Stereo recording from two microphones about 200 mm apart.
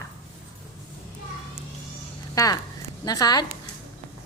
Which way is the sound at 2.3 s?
15° left (ahead or behind).